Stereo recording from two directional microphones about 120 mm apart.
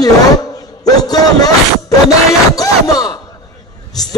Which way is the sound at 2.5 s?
30° left (ahead or behind).